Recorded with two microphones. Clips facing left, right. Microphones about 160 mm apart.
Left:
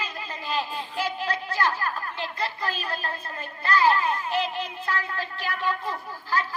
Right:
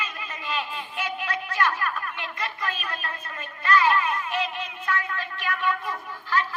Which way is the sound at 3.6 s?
30° left (ahead or behind).